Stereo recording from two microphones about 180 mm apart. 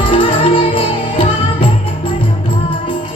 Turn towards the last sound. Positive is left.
turn(degrees=30)  # may be behind; listen again after turning